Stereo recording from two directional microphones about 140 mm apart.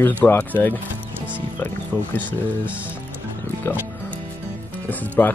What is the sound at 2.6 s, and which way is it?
Speech, 10° right (ahead or behind).